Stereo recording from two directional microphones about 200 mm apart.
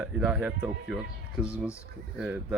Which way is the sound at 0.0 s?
5° right (ahead or behind).